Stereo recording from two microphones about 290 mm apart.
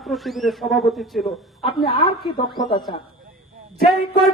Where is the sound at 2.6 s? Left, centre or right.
Centre.